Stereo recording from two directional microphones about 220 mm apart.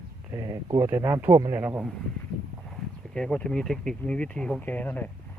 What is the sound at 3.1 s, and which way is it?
Speech, 5° left (ahead or behind).